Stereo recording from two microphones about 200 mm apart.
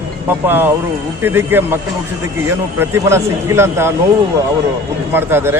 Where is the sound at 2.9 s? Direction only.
15° right (ahead or behind).